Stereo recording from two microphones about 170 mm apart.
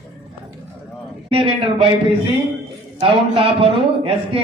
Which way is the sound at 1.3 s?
30° right (ahead or behind).